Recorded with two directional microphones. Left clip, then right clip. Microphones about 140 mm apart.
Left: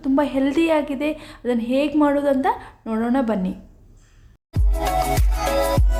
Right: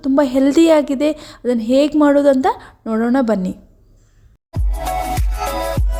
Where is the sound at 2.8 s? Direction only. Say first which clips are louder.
Right 8 dB; 35° right (ahead or behind).